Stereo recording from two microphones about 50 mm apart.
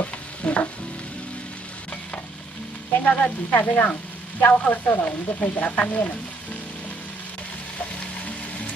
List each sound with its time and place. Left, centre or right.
0.0 s stir: left
3.0 s frying: left
3.5 s speech: left
5.0 s frying: left